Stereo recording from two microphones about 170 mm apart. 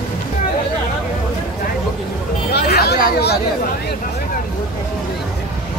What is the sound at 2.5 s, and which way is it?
Chatter, 70° left (ahead or behind).